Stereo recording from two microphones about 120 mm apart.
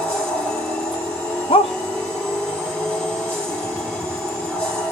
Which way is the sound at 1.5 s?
50° left (ahead or behind).